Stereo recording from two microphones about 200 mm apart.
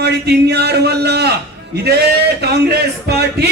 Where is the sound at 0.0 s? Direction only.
55° right (ahead or behind).